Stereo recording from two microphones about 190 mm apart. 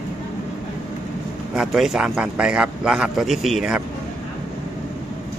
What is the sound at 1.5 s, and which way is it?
Speech, 5° right (ahead or behind).